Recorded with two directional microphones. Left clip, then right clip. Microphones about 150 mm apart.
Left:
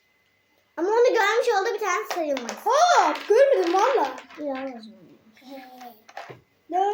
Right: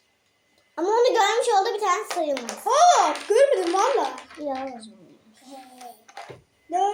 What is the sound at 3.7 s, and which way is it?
Speech, 20° left (ahead or behind).